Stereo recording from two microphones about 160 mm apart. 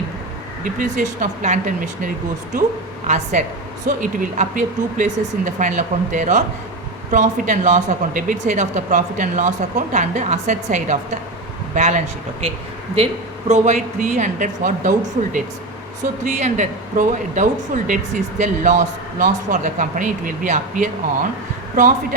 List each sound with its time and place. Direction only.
0.6 s speech: 55° right (ahead or behind)
3.4 s speech: 50° right (ahead or behind)
13.5 s speech: 50° right (ahead or behind)